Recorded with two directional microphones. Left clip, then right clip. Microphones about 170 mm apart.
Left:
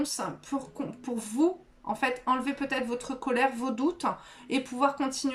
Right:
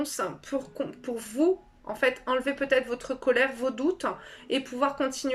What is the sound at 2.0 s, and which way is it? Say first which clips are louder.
Speech: right 3 dB; 25° left (ahead or behind).